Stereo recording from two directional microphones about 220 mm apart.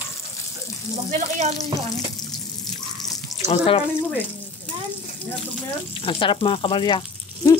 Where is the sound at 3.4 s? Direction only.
25° left (ahead or behind).